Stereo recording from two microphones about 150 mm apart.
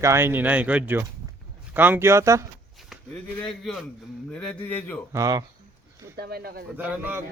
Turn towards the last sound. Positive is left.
turn(degrees=-15)  # may be behind; listen again after turning